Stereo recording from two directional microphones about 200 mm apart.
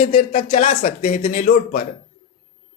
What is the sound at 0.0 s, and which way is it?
Speech, 40° left (ahead or behind).